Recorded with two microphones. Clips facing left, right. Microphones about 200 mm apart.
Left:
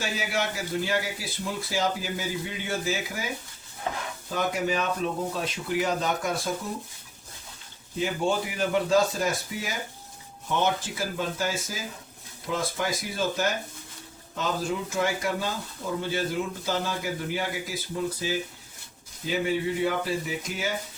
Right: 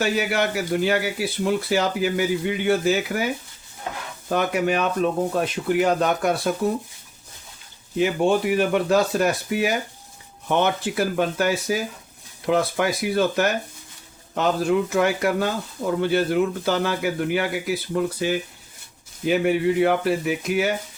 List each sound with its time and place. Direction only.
0.0 s speech: 65° right (ahead or behind)
4.3 s speech: 65° right (ahead or behind)
7.9 s speech: 65° right (ahead or behind)